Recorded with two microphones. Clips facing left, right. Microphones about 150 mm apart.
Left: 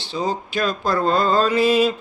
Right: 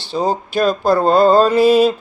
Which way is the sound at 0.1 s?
40° right (ahead or behind).